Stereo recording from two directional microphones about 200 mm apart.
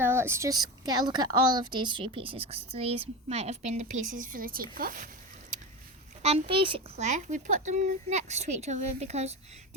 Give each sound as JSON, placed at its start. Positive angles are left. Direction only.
{"t": 0.0, "sound": "a woman's voice", "side_deg": -10}
{"t": 6.2, "sound": "a child's voice", "side_deg": -30}